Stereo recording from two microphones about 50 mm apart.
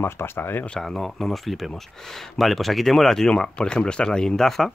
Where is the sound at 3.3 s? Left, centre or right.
Centre.